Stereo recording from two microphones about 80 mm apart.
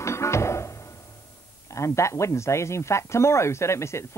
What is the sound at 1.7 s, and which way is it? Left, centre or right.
Speech, left.